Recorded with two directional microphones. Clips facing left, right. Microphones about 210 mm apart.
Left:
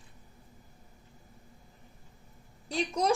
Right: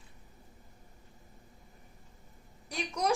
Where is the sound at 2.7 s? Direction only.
25° left (ahead or behind).